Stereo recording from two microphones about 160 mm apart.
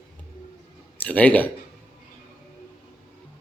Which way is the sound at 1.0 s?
10° left (ahead or behind).